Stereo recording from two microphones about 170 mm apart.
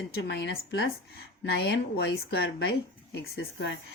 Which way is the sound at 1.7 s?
80° left.